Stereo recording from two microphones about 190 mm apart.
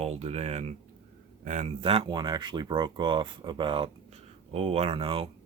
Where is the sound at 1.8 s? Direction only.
30° right (ahead or behind).